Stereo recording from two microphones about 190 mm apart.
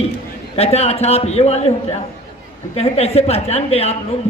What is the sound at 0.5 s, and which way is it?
A man's voice, 35° left (ahead or behind).